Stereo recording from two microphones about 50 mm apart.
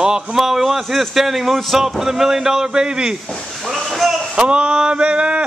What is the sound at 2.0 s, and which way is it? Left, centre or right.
A man's voice, centre.